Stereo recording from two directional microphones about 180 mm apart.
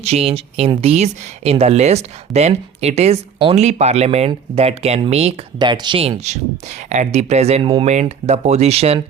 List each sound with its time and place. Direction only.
0.0 s speech: 35° right (ahead or behind)